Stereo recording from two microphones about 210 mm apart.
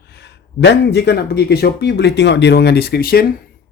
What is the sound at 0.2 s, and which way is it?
Speech, 55° left (ahead or behind).